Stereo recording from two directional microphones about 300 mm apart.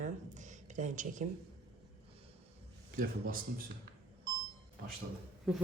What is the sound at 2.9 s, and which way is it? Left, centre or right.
Speech, right.